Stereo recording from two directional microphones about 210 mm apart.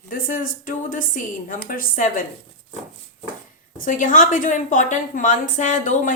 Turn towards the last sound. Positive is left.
turn(degrees=40)  # may be behind; listen again after turning